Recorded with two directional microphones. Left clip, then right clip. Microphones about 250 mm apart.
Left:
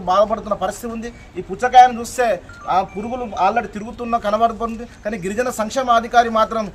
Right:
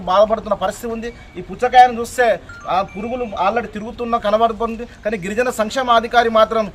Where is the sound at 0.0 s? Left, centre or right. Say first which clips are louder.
Right 2 dB; centre.